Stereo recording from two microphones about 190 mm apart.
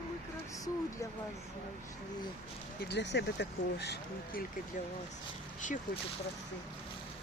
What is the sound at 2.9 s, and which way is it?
Speech, 65° left (ahead or behind).